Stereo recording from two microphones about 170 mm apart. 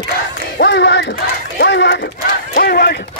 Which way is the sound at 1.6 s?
90° left.